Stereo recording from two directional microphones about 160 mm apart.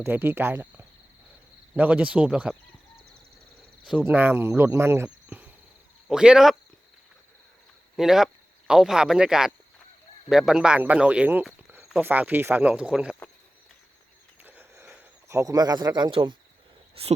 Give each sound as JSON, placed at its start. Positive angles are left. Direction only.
{"t": 0.0, "sound": "speech", "side_deg": -15}
{"t": 3.8, "sound": "speech", "side_deg": -10}
{"t": 7.9, "sound": "speech", "side_deg": -5}
{"t": 14.4, "sound": "a sound", "side_deg": -10}